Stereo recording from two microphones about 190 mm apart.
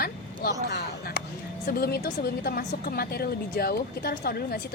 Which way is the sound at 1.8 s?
55° left (ahead or behind).